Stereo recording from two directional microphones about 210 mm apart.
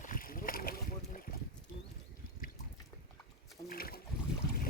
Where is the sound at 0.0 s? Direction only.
40° left (ahead or behind).